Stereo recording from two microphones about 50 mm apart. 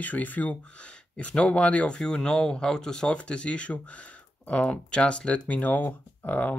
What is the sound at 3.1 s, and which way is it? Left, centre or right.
Speech, left.